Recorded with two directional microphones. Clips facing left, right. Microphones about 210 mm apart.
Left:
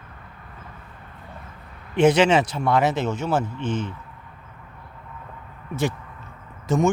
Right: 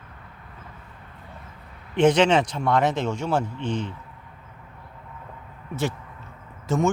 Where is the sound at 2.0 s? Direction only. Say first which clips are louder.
Left 1 dB; 10° left (ahead or behind).